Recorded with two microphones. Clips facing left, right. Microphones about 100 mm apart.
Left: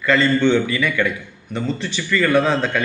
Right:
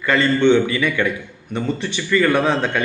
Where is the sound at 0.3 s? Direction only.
25° right (ahead or behind).